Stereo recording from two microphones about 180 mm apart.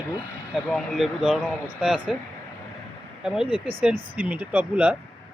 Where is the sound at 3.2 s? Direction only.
5° right (ahead or behind).